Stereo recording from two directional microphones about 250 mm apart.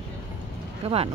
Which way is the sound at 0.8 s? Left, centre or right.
Right.